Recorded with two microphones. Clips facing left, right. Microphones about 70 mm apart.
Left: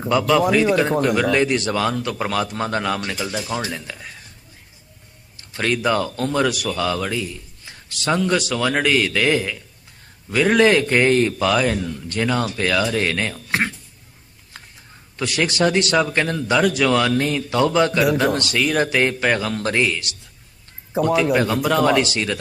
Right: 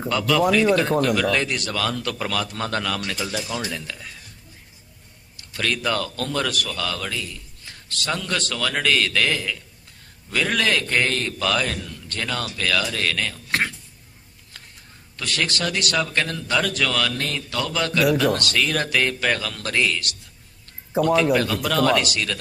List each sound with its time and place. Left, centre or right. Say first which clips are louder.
0.1 s a man's voice: left 4 dB; centre
0.4 s speech: left 1 dB; centre
1.2 s a man's voice: left 4 dB; centre
5.4 s a man's voice: left 4 dB; left
14.5 s a sound: left 4 dB; left
15.1 s a man's voice: left 4 dB; centre
20.9 s a man's voice: left 1 dB; centre
22.0 s a man's voice: left 3 dB; left